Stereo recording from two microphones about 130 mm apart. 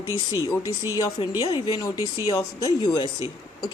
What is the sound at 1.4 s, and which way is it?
Speech, 45° left (ahead or behind).